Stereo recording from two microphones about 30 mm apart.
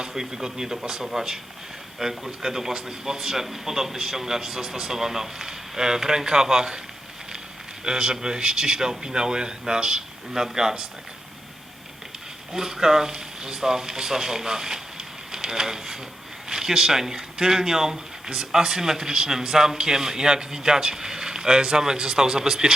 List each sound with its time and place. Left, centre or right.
0.1 s speech: centre
7.9 s speech: right
12.5 s speech: centre